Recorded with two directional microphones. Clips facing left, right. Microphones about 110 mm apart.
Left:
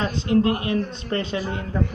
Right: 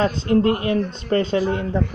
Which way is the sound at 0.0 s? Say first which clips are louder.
Right 3 dB; 40° right (ahead or behind).